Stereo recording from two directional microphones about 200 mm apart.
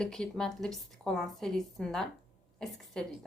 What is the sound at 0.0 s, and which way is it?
A woman's voice, 5° left (ahead or behind).